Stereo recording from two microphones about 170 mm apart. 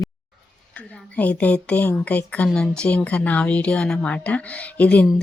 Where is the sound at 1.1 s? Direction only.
10° left (ahead or behind).